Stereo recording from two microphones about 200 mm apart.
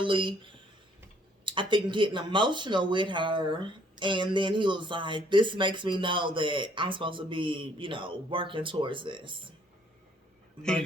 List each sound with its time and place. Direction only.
0.0 s speech: 25° right (ahead or behind)
1.5 s speech: 25° right (ahead or behind)